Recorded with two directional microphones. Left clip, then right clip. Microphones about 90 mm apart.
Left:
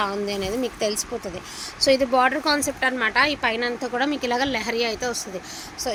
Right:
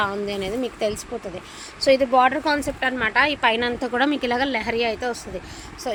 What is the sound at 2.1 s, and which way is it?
Speech, centre (ahead or behind).